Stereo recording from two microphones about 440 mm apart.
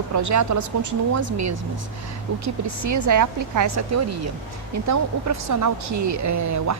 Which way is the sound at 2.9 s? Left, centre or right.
Right.